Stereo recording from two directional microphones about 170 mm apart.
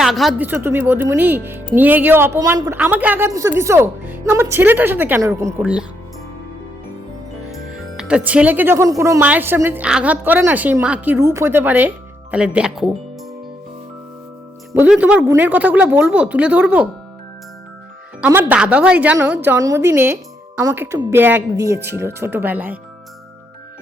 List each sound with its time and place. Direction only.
0.0 s speech: centre (ahead or behind); by 5.6 s 20° right (ahead or behind)
7.5 s speech: centre (ahead or behind)
14.7 s speech: 10° right (ahead or behind)
18.3 s speech: 10° right (ahead or behind)